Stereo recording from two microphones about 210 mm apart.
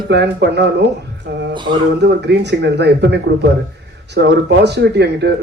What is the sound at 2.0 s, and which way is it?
Speech, 55° right (ahead or behind).